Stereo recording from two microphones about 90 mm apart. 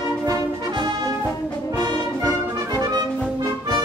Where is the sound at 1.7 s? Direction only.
45° right (ahead or behind).